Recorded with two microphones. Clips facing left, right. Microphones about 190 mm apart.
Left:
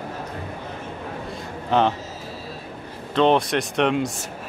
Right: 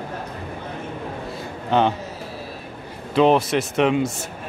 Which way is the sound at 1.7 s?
Centre (ahead or behind).